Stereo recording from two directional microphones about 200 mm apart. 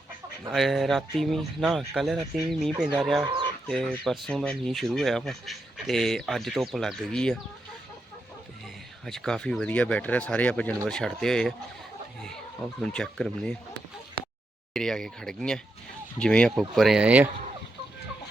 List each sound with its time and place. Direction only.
0.5 s speech: centre (ahead or behind)
3.2 s speech: 20° right (ahead or behind)
3.7 s speech: centre (ahead or behind)
9.0 s speech: centre (ahead or behind)
12.8 s speech: 5° left (ahead or behind)
14.7 s speech: centre (ahead or behind)